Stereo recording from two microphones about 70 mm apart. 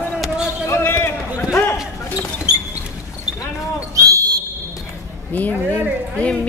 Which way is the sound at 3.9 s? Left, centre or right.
Right.